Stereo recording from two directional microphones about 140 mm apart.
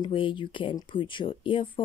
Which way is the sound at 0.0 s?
35° left (ahead or behind).